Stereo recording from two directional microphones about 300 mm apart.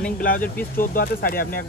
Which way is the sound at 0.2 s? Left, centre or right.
Left.